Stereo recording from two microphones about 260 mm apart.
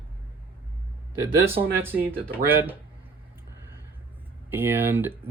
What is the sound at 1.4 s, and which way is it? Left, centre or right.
Speech, centre.